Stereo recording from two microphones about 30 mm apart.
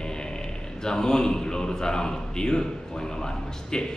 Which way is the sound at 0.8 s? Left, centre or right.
Left.